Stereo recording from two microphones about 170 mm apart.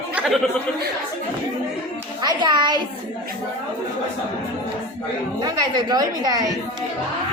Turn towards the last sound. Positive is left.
turn(degrees=-20)  # may be behind; listen again after turning